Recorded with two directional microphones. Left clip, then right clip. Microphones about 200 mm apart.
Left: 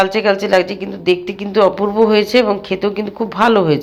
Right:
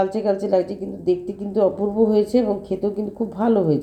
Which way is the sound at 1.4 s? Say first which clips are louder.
Left 7 dB; 10° left (ahead or behind).